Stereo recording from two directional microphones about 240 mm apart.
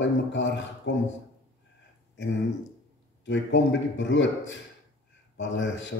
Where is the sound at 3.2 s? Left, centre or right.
Left.